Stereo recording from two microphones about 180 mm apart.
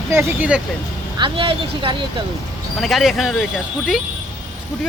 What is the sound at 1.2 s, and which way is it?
Speech, 30° right (ahead or behind).